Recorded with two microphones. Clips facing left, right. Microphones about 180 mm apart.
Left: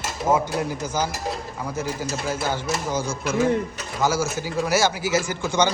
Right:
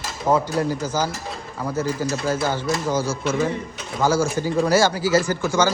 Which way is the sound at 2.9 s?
10° right (ahead or behind).